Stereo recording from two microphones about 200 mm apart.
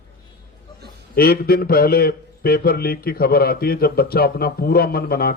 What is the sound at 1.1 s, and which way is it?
A man's voice, 50° left (ahead or behind).